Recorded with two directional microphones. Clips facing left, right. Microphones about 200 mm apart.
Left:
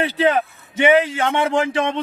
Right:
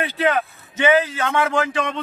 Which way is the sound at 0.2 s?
30° left (ahead or behind).